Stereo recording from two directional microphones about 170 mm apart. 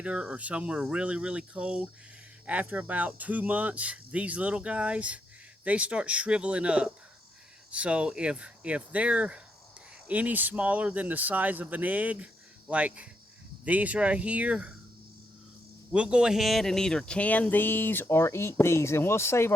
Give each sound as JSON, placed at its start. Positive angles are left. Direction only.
{"t": 0.0, "sound": "speech", "side_deg": -5}
{"t": 15.9, "sound": "speech", "side_deg": -5}